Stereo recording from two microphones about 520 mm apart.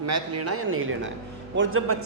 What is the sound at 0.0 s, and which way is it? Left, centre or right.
A man's voice, right.